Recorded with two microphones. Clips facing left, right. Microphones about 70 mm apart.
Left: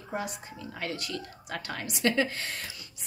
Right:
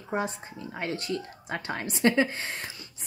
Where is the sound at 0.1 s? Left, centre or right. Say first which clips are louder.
Right 4 dB; right.